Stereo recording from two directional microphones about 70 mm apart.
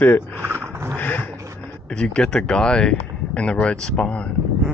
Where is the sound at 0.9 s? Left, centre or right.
Left.